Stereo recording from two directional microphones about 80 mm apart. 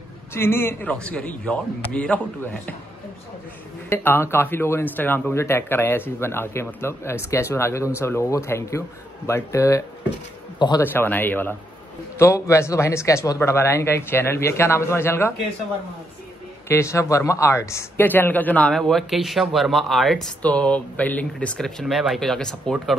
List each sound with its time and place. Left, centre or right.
0.3 s speech: left
0.8 s a man's voice: centre
3.9 s speech: left
10.8 s speech: left
12.2 s speech: left
16.6 s speech: left
18.0 s speech: left
18.7 s speech: centre
20.4 s a man's voice: centre